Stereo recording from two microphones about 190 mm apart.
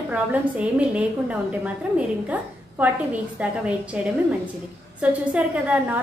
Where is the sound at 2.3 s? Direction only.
10° right (ahead or behind).